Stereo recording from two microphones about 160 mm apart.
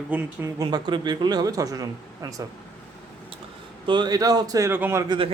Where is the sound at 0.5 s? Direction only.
25° right (ahead or behind).